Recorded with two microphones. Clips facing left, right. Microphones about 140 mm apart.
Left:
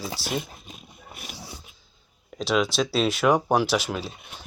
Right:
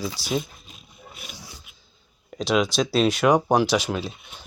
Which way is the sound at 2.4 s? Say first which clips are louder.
Right 2 dB; 5° left (ahead or behind).